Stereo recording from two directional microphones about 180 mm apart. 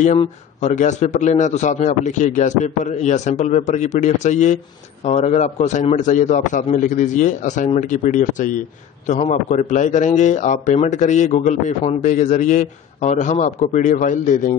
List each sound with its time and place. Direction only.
0.6 s a man's voice: 40° left (ahead or behind)